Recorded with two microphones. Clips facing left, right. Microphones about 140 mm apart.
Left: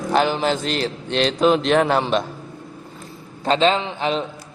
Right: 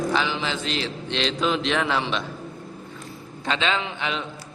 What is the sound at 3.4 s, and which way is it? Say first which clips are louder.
Speech: left 7 dB; 35° left (ahead or behind).